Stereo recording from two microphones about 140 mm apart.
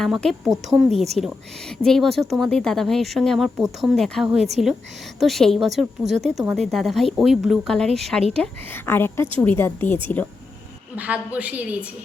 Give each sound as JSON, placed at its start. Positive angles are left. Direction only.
{"t": 0.0, "sound": "speech", "side_deg": 5}
{"t": 8.4, "sound": "a woman's voice", "side_deg": 15}
{"t": 10.9, "sound": "a woman's voice", "side_deg": -10}